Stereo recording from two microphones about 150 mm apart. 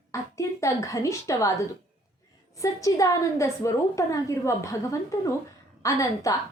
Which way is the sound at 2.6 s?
20° left (ahead or behind).